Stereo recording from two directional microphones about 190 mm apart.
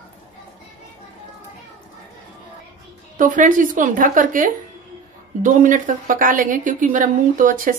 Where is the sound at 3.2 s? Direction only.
45° right (ahead or behind).